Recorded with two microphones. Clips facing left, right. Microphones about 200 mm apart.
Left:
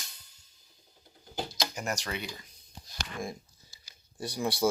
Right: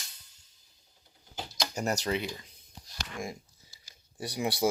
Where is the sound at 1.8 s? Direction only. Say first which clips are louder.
Right 8 dB; 35° right (ahead or behind).